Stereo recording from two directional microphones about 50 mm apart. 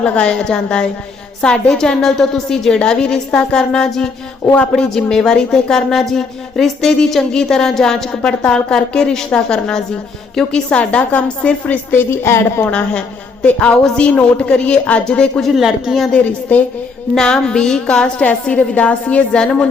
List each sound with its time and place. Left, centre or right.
0.0 s a woman's voice: left
12.1 s a woman's voice: left
12.7 s a woman's voice: centre
15.5 s a woman's voice: centre
16.5 s a woman's voice: left
17.2 s a woman's voice: centre